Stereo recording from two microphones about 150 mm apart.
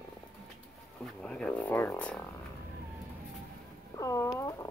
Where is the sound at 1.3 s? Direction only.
5° left (ahead or behind).